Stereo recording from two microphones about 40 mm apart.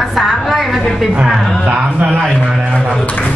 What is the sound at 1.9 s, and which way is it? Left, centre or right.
Speech, right.